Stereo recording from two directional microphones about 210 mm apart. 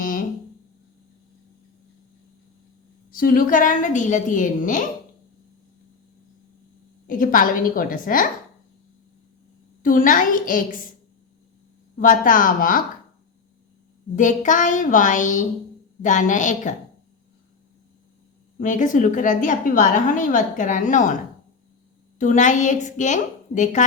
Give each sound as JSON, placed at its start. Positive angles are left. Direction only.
{"t": 0.0, "sound": "a sound", "side_deg": 40}
{"t": 3.1, "sound": "a woman's voice", "side_deg": 45}
{"t": 7.1, "sound": "a woman's voice", "side_deg": 40}
{"t": 9.8, "sound": "a woman's voice", "side_deg": 40}
{"t": 11.9, "sound": "a woman's voice", "side_deg": 40}
{"t": 14.2, "sound": "a woman's voice", "side_deg": 35}
{"t": 18.6, "sound": "a woman's voice", "side_deg": 40}
{"t": 22.2, "sound": "a woman's voice", "side_deg": 35}